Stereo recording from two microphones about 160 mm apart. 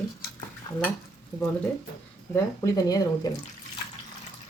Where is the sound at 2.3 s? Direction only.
20° left (ahead or behind).